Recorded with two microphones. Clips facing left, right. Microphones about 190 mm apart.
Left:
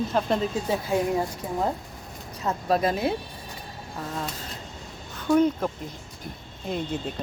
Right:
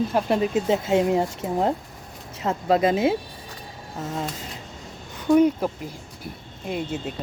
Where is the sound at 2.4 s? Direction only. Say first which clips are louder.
Right 3 dB; 20° right (ahead or behind).